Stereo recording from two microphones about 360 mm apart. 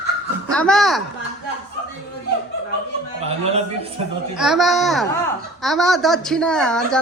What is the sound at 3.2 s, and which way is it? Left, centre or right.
Speech, centre.